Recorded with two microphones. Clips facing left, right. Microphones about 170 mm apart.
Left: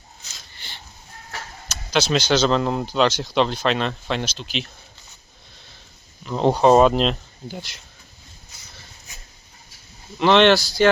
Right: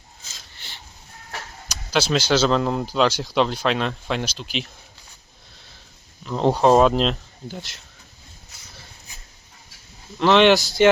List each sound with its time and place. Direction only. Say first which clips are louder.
1.9 s speech: even; 5° right (ahead or behind)
6.2 s speech: left 1 dB; centre (ahead or behind)
10.2 s speech: even; 5° right (ahead or behind)
10.5 s speech: right 1 dB; 20° right (ahead or behind)